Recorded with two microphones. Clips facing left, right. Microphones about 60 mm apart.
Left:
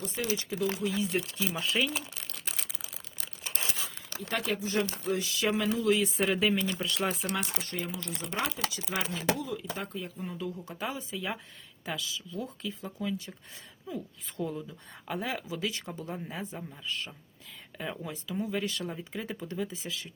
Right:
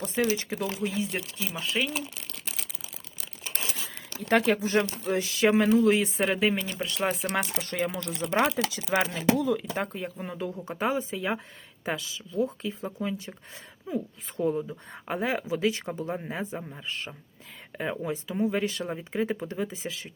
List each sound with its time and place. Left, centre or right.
0.0 s speech: right
1.1 s speech: right
1.5 s speech: centre
4.3 s speech: right
5.4 s speech: right
6.1 s speech: right
7.6 s speech: right
8.2 s speech: right
10.6 s speech: right